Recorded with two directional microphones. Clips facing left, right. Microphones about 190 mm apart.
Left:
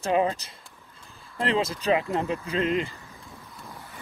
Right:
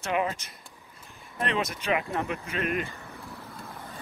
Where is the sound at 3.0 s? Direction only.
60° right (ahead or behind).